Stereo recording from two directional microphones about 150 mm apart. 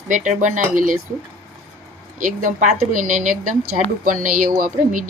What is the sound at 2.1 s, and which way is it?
Speech, 60° right (ahead or behind).